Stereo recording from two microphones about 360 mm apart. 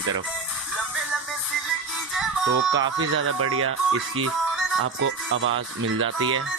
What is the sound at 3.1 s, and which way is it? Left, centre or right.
Speech, right.